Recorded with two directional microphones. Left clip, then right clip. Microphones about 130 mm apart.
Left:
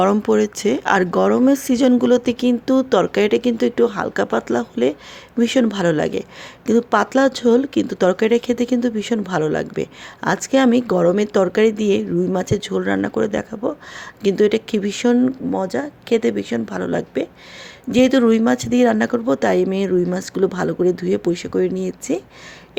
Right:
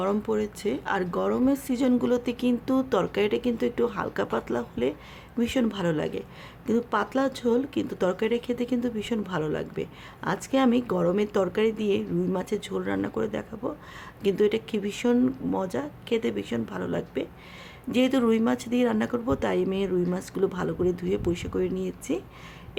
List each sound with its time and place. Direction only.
0.0 s speech: 50° left (ahead or behind)